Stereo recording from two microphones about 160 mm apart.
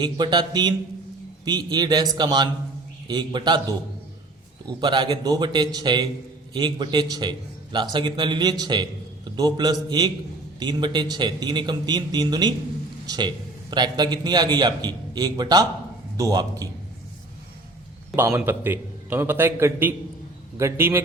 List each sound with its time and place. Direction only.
0.0 s a man's voice: 30° right (ahead or behind)
4.8 s a man's voice: 30° right (ahead or behind)
18.2 s a man's voice: 15° right (ahead or behind)